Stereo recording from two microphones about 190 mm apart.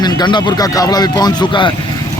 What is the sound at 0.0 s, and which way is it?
A man's voice, 20° left (ahead or behind).